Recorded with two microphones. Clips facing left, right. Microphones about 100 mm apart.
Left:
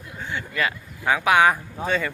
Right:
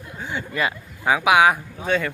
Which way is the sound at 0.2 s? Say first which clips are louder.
Right 1 dB; 15° right (ahead or behind).